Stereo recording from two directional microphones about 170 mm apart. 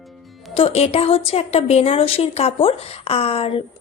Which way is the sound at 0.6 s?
35° left (ahead or behind).